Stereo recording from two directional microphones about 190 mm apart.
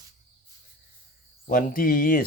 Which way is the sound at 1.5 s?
45° left (ahead or behind).